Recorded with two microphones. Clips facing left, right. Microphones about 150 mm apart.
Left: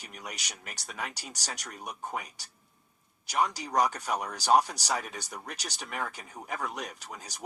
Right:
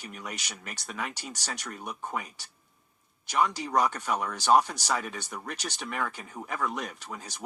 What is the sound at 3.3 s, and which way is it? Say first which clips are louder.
Speech: right 2 dB; 40° left (ahead or behind).